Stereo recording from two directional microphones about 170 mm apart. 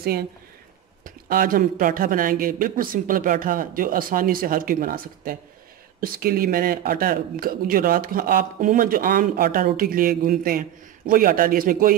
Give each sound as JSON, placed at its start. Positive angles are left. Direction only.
{"t": 1.0, "sound": "speech", "side_deg": -55}